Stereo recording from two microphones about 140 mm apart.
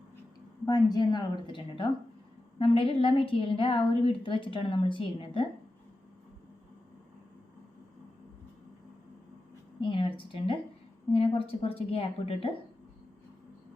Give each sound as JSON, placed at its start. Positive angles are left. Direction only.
{"t": 0.6, "sound": "a woman's voice", "side_deg": 30}
{"t": 10.2, "sound": "a woman's voice", "side_deg": 40}